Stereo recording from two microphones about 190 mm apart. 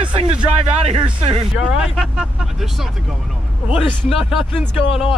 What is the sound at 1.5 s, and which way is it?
Speech, 5° right (ahead or behind).